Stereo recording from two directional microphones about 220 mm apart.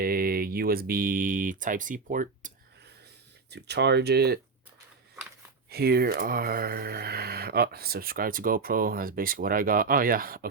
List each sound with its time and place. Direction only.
0.0 s speech: 45° right (ahead or behind)
3.5 s speech: 50° right (ahead or behind)
5.6 s speech: 45° right (ahead or behind)